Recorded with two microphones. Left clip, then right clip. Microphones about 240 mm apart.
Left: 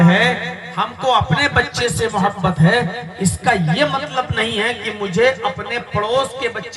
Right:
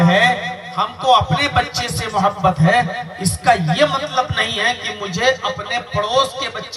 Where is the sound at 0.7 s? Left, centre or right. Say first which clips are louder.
Right 2 dB; left.